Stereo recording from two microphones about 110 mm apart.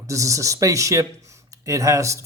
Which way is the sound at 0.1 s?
30° right (ahead or behind).